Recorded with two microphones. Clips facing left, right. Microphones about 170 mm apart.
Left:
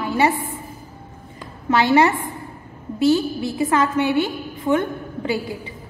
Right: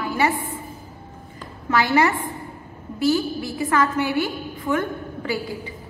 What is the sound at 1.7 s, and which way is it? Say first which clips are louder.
A woman's voice: left 3 dB; 25° left (ahead or behind).